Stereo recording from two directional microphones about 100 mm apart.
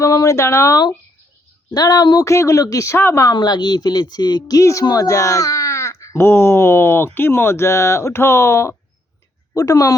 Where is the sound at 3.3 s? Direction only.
45° left (ahead or behind).